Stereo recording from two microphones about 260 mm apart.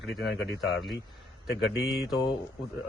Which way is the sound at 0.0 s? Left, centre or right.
Left.